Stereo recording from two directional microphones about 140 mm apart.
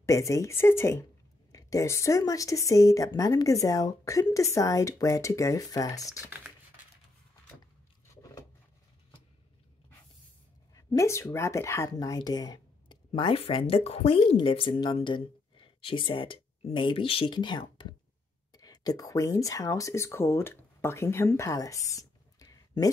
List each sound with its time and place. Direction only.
0.0 s speech: 20° left (ahead or behind)
10.7 s speech: 25° left (ahead or behind)